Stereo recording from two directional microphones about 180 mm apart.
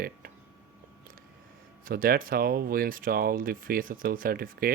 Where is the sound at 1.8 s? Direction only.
55° right (ahead or behind).